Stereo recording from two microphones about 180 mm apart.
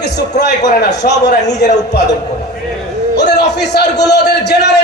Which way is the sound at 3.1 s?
70° left (ahead or behind).